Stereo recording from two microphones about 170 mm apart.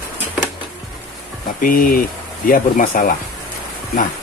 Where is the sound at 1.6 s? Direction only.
55° left (ahead or behind).